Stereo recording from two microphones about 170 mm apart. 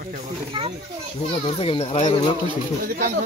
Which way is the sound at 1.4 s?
35° left (ahead or behind).